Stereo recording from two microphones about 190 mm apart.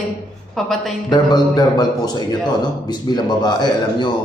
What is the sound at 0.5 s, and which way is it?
Speech, centre (ahead or behind).